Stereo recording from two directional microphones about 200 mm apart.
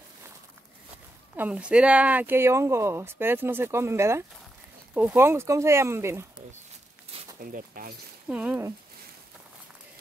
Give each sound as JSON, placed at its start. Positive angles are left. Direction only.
{"t": 1.3, "sound": "speech", "side_deg": -10}
{"t": 7.5, "sound": "speech", "side_deg": -45}
{"t": 8.3, "sound": "speech", "side_deg": -5}